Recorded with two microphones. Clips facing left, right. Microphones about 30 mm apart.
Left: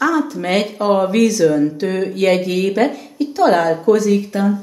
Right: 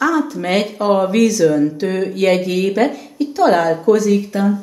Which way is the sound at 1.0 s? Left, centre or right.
Centre.